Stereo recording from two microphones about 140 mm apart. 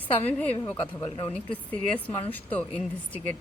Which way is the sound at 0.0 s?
10° left (ahead or behind).